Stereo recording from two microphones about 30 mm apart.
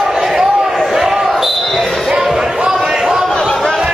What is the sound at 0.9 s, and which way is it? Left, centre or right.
Basketball bounce, centre.